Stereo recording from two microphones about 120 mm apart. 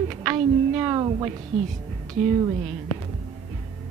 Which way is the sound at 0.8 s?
35° right (ahead or behind).